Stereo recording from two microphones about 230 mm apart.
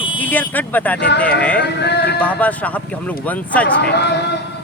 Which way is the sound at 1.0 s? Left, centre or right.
Left.